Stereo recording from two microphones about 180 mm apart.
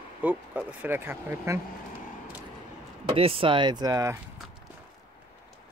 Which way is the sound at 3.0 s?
30° right (ahead or behind).